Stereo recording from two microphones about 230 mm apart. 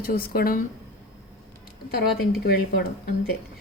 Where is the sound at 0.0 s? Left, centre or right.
Left.